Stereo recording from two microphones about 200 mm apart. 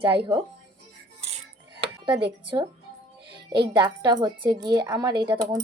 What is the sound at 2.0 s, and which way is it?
Speech, 25° right (ahead or behind).